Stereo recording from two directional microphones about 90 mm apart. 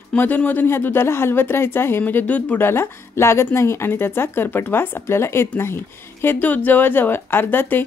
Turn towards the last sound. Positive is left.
turn(degrees=25)  # may be behind; listen again after turning